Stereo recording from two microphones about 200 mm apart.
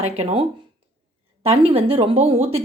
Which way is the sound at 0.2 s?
30° right (ahead or behind).